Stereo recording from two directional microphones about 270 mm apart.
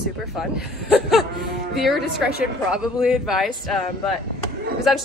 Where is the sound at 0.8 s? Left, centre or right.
Centre.